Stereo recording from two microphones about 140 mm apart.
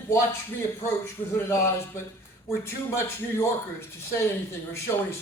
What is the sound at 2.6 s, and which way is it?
A man's voice, 20° left (ahead or behind).